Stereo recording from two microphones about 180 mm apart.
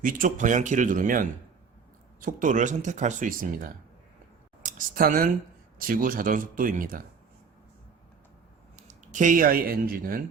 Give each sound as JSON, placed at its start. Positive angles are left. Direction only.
{"t": 0.0, "sound": "speech", "side_deg": -50}
{"t": 8.9, "sound": "speech", "side_deg": -45}